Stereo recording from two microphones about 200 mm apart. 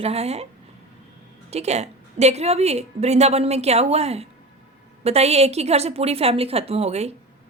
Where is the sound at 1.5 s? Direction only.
30° right (ahead or behind).